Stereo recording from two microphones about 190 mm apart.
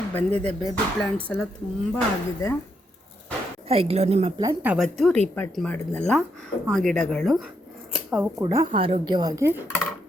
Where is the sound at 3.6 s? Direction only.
30° right (ahead or behind).